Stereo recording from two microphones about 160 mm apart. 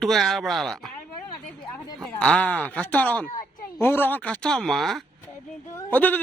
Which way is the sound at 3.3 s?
60° left (ahead or behind).